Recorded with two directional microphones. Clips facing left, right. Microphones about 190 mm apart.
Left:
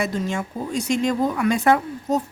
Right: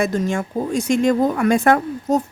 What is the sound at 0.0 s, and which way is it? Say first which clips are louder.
Speech: right 4 dB; 50° right (ahead or behind).